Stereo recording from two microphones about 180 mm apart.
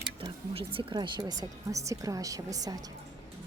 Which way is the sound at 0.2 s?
30° right (ahead or behind).